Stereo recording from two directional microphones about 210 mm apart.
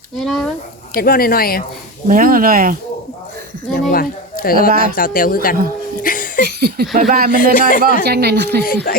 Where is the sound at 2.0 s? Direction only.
40° right (ahead or behind).